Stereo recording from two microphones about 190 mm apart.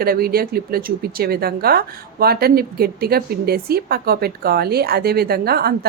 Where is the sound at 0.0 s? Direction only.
55° right (ahead or behind).